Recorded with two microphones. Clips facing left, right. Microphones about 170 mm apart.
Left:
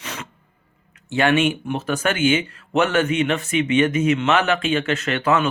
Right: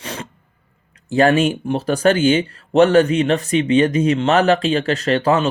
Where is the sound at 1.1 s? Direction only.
35° right (ahead or behind).